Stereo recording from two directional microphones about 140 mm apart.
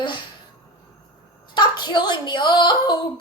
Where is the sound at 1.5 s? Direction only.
30° left (ahead or behind).